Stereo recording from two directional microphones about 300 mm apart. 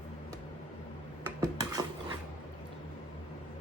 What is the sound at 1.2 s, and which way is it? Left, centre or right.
Dishes, centre.